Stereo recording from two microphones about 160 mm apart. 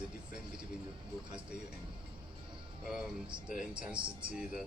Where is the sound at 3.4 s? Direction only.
5° right (ahead or behind).